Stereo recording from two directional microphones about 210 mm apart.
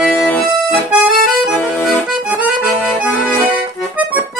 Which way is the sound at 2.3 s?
5° right (ahead or behind).